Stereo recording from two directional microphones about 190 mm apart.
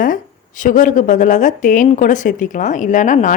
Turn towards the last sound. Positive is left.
turn(degrees=40)  # may be behind; listen again after turning